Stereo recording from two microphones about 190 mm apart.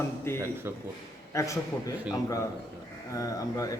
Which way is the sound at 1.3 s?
15° left (ahead or behind).